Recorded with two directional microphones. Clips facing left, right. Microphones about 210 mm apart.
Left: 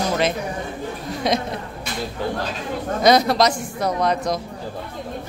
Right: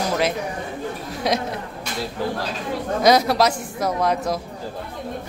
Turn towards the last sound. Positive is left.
turn(degrees=-10)  # may be behind; listen again after turning